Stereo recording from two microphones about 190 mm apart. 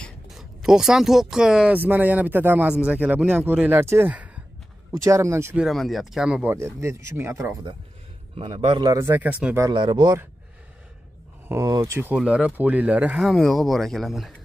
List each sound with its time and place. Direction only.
0.0 s speech: centre (ahead or behind)
5.7 s speech: centre (ahead or behind)
8.4 s speech: 30° right (ahead or behind); by 9.7 s 5° right (ahead or behind)
9.7 s speech: 25° right (ahead or behind)
11.4 s speech: 15° right (ahead or behind)